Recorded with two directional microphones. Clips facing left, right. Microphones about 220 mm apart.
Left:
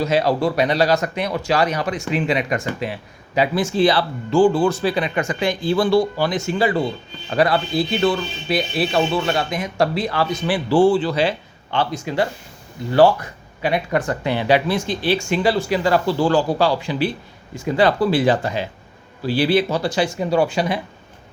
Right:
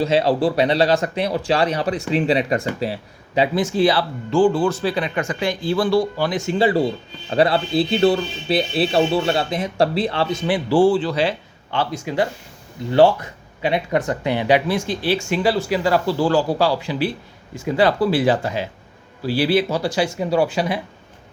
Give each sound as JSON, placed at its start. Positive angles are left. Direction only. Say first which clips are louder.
{"t": 0.0, "sound": "speech", "louder": "right 1 dB", "side_deg": -30}
{"t": 4.3, "sound": "speech", "louder": "left 1 dB", "side_deg": 10}
{"t": 6.3, "sound": "speech", "louder": "right 3 dB", "side_deg": -20}
{"t": 6.7, "sound": "speech", "louder": "right 2 dB", "side_deg": -35}